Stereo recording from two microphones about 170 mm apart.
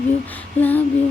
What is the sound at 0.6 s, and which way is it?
Female singing, 10° left (ahead or behind).